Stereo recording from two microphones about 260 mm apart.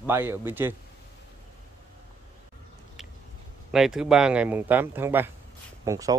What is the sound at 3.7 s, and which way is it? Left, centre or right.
Speech, centre.